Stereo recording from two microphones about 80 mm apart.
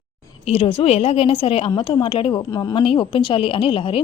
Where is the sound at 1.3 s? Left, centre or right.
Left.